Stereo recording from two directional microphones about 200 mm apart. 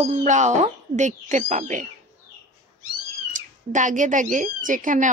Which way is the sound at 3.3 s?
40° right (ahead or behind).